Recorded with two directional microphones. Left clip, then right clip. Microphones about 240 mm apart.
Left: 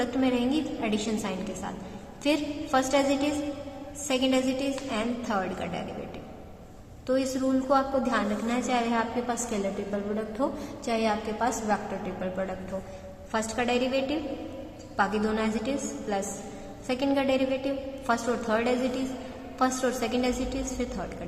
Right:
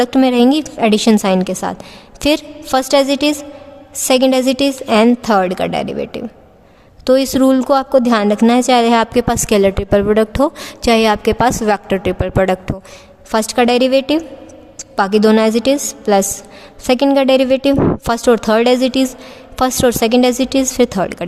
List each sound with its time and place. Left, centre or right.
0.0 s a woman's voice: right